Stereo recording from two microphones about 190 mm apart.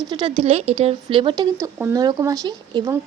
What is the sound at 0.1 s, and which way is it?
Speech, 25° right (ahead or behind).